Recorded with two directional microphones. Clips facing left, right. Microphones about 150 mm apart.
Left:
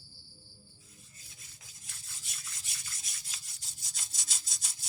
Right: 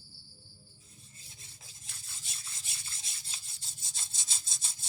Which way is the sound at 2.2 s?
25° right (ahead or behind).